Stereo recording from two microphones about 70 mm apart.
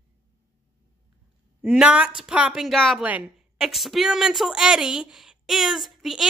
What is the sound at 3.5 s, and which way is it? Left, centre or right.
A woman's voice, centre.